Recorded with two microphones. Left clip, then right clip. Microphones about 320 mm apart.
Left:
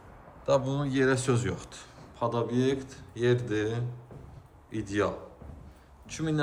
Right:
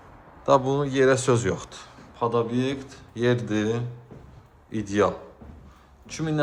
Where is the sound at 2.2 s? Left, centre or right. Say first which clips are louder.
Right 5 dB; centre.